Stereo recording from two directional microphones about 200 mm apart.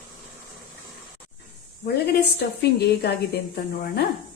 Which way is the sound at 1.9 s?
55° left (ahead or behind).